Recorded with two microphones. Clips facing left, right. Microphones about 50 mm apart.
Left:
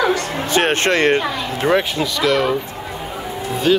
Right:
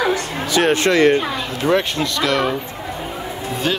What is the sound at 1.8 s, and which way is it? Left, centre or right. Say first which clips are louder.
Speech: left 1 dB; centre.